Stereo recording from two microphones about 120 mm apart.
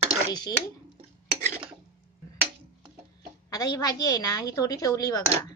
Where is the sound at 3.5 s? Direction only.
30° left (ahead or behind).